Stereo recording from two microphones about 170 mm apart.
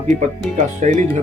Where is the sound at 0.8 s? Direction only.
45° right (ahead or behind).